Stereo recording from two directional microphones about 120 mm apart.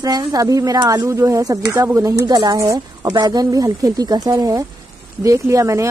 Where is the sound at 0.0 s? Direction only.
30° right (ahead or behind).